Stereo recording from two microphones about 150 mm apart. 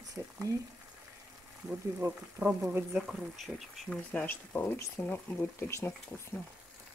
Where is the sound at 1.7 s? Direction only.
10° right (ahead or behind).